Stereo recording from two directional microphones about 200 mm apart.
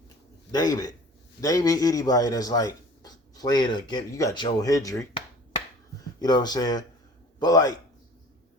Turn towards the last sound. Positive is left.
turn(degrees=20)  # may be behind; listen again after turning